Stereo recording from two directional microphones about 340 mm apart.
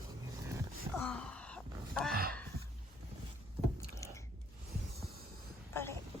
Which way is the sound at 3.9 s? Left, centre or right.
Centre.